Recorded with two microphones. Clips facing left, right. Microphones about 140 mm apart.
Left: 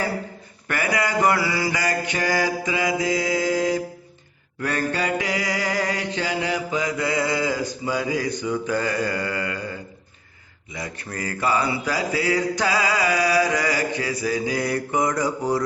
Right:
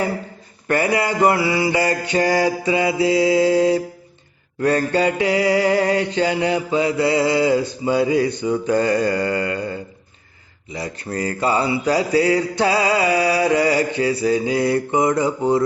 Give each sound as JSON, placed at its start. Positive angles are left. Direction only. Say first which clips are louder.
{"t": 0.7, "sound": "mantra", "louder": "right 5 dB", "side_deg": -30}